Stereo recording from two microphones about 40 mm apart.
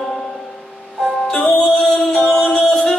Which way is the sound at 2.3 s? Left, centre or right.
Left.